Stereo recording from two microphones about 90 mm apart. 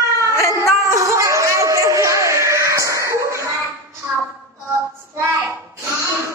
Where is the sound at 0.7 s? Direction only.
35° right (ahead or behind).